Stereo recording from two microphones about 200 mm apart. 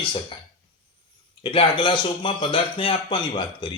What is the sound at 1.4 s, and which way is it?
Speech, 25° left (ahead or behind).